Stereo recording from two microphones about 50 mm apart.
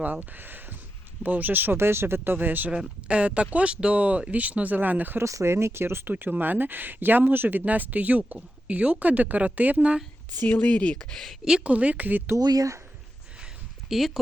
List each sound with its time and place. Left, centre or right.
0.0 s a woman's voice: right
3.1 s a woman's voice: right
5.2 s speech: right
6.1 s a woman's voice: right
10.5 s speech: left
11.1 s speech: centre
11.6 s speech: right
13.9 s speech: centre